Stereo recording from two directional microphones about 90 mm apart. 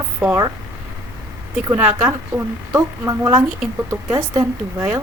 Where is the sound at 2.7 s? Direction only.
35° right (ahead or behind).